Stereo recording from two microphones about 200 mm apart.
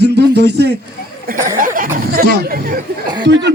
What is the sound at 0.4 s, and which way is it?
Speech, 55° right (ahead or behind).